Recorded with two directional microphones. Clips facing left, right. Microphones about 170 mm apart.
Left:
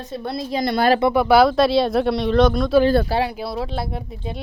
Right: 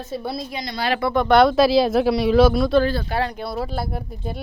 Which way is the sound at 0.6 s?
55° left (ahead or behind).